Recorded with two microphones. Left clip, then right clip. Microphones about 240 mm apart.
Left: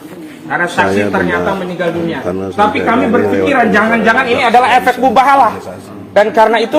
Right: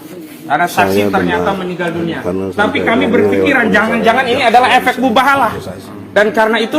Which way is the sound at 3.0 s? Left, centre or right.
Right.